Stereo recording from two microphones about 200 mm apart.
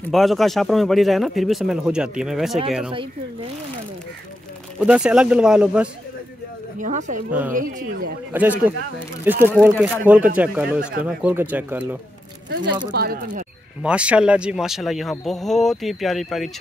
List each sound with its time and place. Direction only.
0.1 s speech: centre (ahead or behind)
4.7 s speech: 5° right (ahead or behind)
6.8 s speech: 40° right (ahead or behind)
8.3 s speech: 10° right (ahead or behind)
12.9 s speech: 50° right (ahead or behind)
13.8 s speech: 5° right (ahead or behind)